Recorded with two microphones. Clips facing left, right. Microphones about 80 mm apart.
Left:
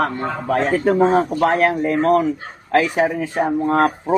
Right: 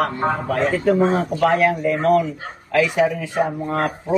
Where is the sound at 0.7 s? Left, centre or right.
Left.